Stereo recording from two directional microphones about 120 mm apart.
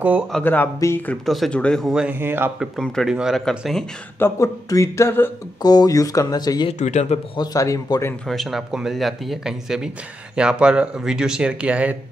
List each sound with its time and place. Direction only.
0.4 s speech: 15° left (ahead or behind)
1.2 s speech: centre (ahead or behind)
2.0 s speech: 15° right (ahead or behind)
2.6 s speech: centre (ahead or behind)
4.2 s speech: 25° left (ahead or behind)
5.6 s speech: 35° left (ahead or behind)
6.7 s speech: 70° left (ahead or behind)
7.3 s speech: 30° left (ahead or behind)
8.3 s speech: centre (ahead or behind)